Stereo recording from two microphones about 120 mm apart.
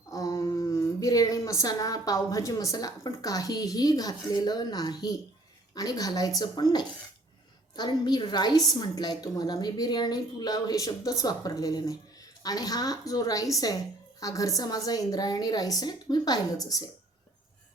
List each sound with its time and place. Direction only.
0.1 s a woman's voice: 30° left (ahead or behind)